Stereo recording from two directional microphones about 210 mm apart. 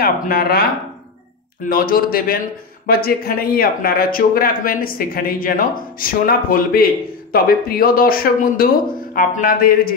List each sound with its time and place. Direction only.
0.0 s speech: 45° left (ahead or behind)